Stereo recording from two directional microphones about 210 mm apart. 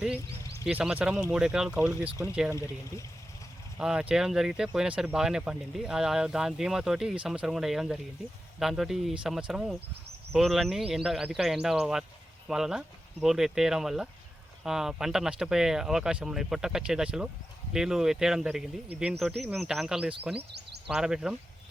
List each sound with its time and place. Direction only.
0.6 s speech: 5° right (ahead or behind)
3.8 s speech: 5° right (ahead or behind)
20.5 s a sound: 50° right (ahead or behind)
20.8 s speech: 5° right (ahead or behind)